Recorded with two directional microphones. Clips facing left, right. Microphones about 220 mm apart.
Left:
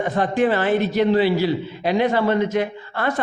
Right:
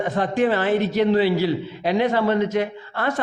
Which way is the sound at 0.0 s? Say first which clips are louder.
Left 1 dB; 10° left (ahead or behind).